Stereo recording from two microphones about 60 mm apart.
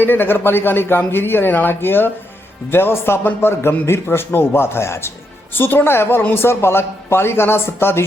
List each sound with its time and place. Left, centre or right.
0.0 s a man's voice: left